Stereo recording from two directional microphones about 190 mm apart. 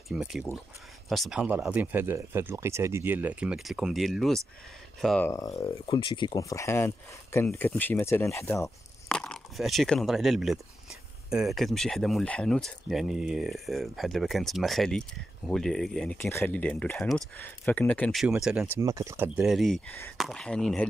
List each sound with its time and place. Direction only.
0.1 s speech: 5° right (ahead or behind)
5.6 s speech: 25° left (ahead or behind)
9.1 s speech: 5° left (ahead or behind)
18.8 s speech: 15° right (ahead or behind); by 20.8 s 5° left (ahead or behind)